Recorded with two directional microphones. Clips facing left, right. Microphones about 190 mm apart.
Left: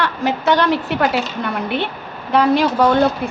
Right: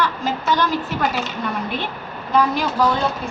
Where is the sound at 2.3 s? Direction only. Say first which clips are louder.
Left 5 dB; 70° left (ahead or behind).